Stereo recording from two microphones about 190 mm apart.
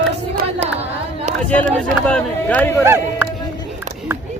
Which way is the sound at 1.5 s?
5° left (ahead or behind).